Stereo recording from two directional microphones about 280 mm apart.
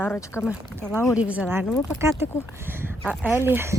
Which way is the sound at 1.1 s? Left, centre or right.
Centre.